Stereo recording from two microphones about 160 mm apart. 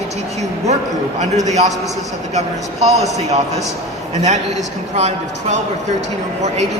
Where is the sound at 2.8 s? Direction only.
45° right (ahead or behind).